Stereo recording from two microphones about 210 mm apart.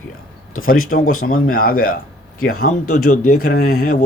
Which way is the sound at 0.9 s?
40° left (ahead or behind).